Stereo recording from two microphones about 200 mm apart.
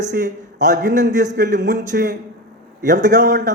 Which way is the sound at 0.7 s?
40° right (ahead or behind).